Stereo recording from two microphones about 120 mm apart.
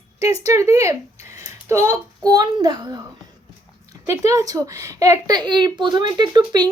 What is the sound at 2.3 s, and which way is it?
Speech, 35° right (ahead or behind).